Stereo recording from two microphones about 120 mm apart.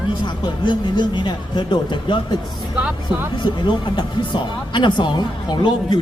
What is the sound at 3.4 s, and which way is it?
Speech, 40° left (ahead or behind).